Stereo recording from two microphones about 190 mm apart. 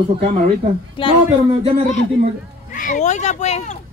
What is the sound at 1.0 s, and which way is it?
Speech, 25° left (ahead or behind).